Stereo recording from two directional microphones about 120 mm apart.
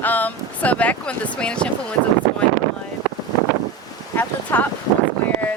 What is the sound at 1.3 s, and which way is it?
Speech, 10° left (ahead or behind).